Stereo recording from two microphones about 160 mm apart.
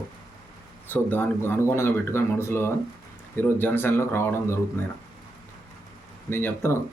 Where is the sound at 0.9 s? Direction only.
10° left (ahead or behind).